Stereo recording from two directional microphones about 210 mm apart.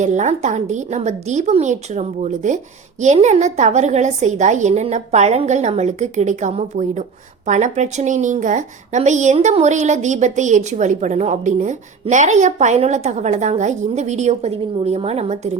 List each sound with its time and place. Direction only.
0.0 s a woman's voice: 35° right (ahead or behind)